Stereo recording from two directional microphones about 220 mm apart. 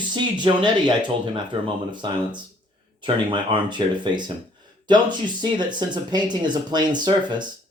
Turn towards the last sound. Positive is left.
turn(degrees=-20)  # may be behind; listen again after turning